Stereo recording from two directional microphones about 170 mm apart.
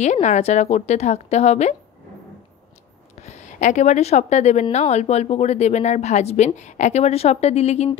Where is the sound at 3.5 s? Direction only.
45° left (ahead or behind).